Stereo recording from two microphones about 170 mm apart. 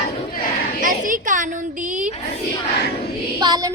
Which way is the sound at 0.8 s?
50° right (ahead or behind).